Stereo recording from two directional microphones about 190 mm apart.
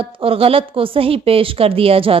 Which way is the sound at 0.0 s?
30° right (ahead or behind).